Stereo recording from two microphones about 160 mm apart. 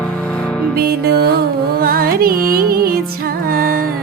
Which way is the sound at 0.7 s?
75° right (ahead or behind).